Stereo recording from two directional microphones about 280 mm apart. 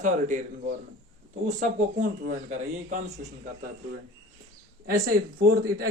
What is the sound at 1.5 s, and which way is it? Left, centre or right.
A man's voice, right.